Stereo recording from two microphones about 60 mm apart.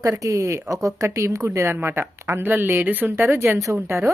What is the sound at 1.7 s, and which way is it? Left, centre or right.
Speech, right.